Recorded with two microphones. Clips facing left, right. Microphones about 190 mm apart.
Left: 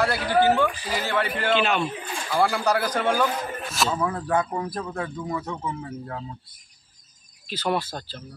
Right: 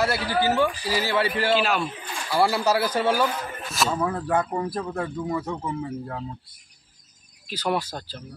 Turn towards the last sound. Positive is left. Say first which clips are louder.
# even
turn(degrees=-10)  # may be behind; listen again after turning